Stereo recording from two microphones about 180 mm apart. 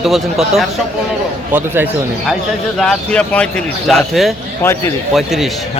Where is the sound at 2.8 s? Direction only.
5° left (ahead or behind).